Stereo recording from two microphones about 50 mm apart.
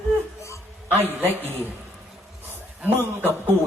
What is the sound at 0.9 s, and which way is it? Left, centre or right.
Speech, right.